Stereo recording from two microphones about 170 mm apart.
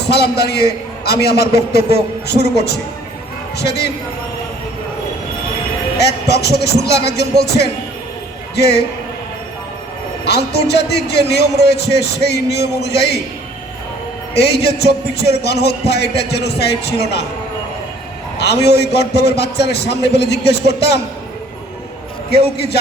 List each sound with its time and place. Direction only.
0.1 s a man's voice: 75° left (ahead or behind)
6.0 s a man's voice: 75° left (ahead or behind)
10.2 s a man's voice: 75° left (ahead or behind)
14.3 s a man's voice: 75° left (ahead or behind)
18.3 s a man's voice: 75° left (ahead or behind)
22.5 s a man's voice: 75° left (ahead or behind)